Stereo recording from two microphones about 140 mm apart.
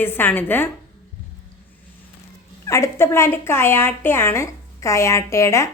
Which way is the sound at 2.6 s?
20° left (ahead or behind).